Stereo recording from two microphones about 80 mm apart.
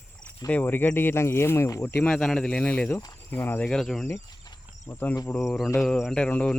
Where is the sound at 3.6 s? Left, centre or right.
Centre.